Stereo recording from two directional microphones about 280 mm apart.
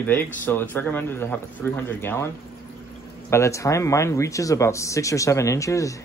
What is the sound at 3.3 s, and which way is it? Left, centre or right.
Speech, centre.